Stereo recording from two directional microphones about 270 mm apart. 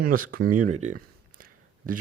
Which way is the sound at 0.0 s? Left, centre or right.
Right.